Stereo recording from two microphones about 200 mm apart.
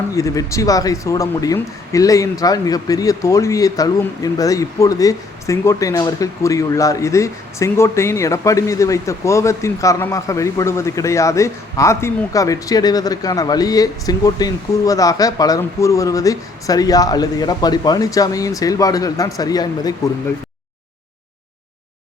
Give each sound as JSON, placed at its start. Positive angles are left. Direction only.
{"t": 0.2, "sound": "speech", "side_deg": 15}